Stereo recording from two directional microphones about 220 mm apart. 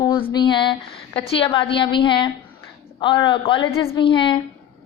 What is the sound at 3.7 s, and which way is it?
Speech, 10° left (ahead or behind).